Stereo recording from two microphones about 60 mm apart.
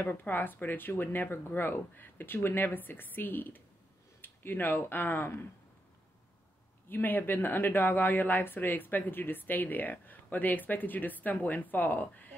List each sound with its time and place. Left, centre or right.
0.0 s speech: left
6.9 s speech: left